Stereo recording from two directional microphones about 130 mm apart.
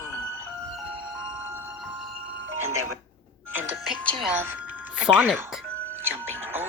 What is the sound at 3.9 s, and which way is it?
Music, 10° left (ahead or behind).